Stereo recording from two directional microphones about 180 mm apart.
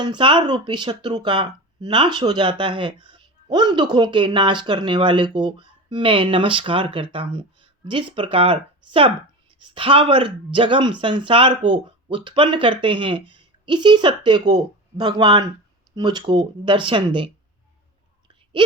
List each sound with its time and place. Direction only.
0.0 s speech: 25° right (ahead or behind)